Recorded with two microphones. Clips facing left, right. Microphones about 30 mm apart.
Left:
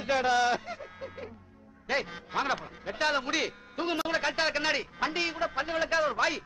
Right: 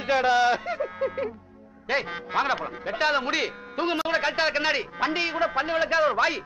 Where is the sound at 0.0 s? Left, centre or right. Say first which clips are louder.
Right 5 dB; centre.